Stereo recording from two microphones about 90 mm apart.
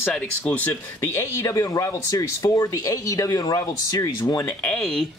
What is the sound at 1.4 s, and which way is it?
Speech, 35° left (ahead or behind).